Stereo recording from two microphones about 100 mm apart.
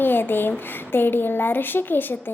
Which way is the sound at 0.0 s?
20° left (ahead or behind).